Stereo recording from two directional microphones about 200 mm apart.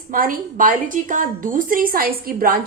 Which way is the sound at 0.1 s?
45° right (ahead or behind).